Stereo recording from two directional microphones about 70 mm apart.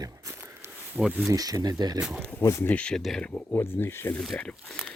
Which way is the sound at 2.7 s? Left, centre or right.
Centre.